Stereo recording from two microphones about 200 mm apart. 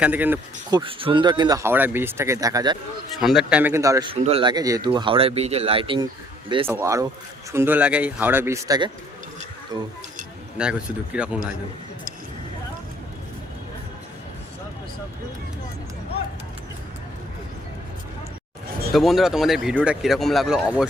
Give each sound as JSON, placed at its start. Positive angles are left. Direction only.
{"t": 0.0, "sound": "speech", "side_deg": -10}
{"t": 0.7, "sound": "speech", "side_deg": -25}
{"t": 3.2, "sound": "speech", "side_deg": 0}
{"t": 4.1, "sound": "speech", "side_deg": -30}
{"t": 6.7, "sound": "speech", "side_deg": -15}
{"t": 10.6, "sound": "speech", "side_deg": -5}
{"t": 18.9, "sound": "speech", "side_deg": 0}